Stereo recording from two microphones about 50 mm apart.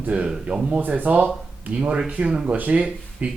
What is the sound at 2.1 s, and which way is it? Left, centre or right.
Speech, centre.